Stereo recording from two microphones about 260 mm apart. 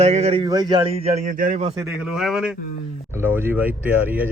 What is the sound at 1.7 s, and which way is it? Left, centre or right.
A man's voice, centre.